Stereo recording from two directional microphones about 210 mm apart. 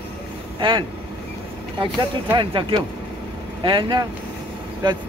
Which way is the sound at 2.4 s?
25° right (ahead or behind).